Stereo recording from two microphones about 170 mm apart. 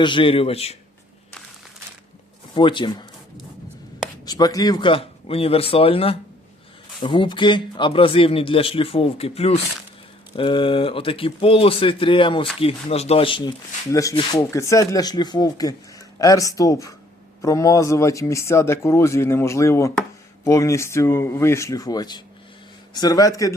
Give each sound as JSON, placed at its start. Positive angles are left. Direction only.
{"t": 0.0, "sound": "a man's voice", "side_deg": 30}
{"t": 2.6, "sound": "speech", "side_deg": 30}
{"t": 4.3, "sound": "a man's voice", "side_deg": 20}
{"t": 13.9, "sound": "speech", "side_deg": 20}